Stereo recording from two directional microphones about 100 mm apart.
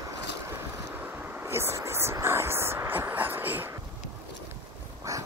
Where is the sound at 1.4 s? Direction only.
25° right (ahead or behind).